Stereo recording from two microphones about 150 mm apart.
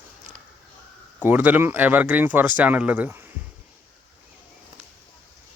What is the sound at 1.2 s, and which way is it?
Speech, 10° right (ahead or behind).